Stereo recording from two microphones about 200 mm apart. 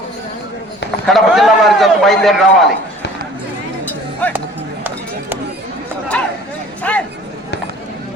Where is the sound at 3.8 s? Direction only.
10° left (ahead or behind).